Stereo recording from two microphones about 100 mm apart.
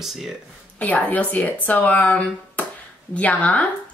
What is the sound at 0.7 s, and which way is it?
Speech, 15° left (ahead or behind).